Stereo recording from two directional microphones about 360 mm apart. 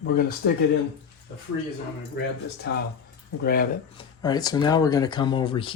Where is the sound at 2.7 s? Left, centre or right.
Left.